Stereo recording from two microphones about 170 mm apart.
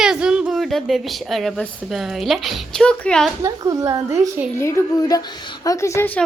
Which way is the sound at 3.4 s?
20° right (ahead or behind).